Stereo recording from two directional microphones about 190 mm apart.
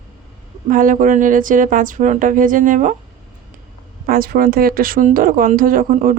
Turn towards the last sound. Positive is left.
turn(degrees=-45)  # may be behind; listen again after turning